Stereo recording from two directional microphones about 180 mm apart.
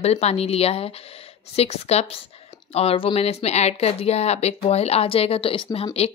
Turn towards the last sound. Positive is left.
turn(degrees=25)  # may be behind; listen again after turning